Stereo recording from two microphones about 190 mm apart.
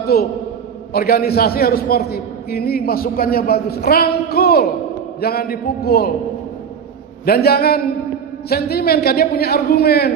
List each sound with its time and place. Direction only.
0.1 s a man's voice: 55° left (ahead or behind)
7.3 s a man's voice: 55° left (ahead or behind)